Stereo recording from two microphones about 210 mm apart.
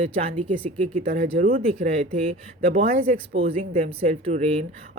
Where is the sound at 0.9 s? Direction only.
40° right (ahead or behind).